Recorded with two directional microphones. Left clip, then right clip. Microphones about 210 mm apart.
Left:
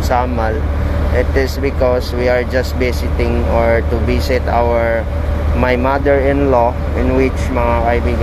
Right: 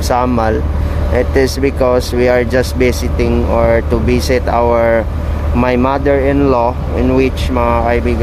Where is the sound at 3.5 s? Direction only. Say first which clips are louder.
Right 2 dB; 40° right (ahead or behind).